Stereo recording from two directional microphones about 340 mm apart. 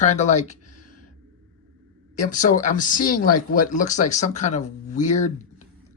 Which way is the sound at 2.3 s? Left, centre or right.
Left.